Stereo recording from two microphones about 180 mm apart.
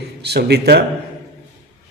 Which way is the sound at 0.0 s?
65° right (ahead or behind).